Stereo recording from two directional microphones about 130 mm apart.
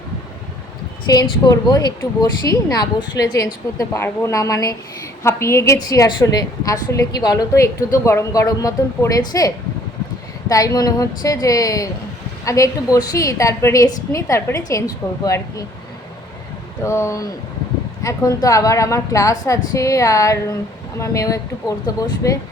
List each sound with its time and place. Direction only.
1.1 s a woman's voice: 30° left (ahead or behind)
10.5 s a woman's voice: 25° left (ahead or behind)
16.8 s a woman's voice: 20° left (ahead or behind)